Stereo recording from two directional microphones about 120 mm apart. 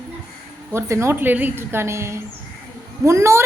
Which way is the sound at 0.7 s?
25° right (ahead or behind).